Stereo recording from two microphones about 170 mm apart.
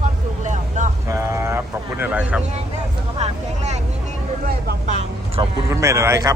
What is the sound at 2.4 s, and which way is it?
Speech, 40° right (ahead or behind).